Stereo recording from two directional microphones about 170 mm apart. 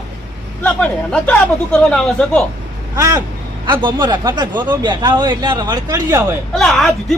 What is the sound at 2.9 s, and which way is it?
Speech, 20° right (ahead or behind).